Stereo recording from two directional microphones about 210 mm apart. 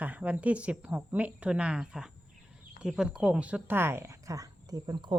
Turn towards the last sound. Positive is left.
turn(degrees=-20)  # may be behind; listen again after turning